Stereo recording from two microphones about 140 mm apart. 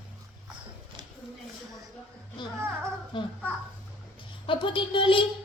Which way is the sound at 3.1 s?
35° left (ahead or behind).